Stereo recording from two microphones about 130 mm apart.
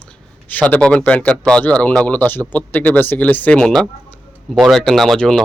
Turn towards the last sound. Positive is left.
turn(degrees=0)  # may be behind; listen again after turning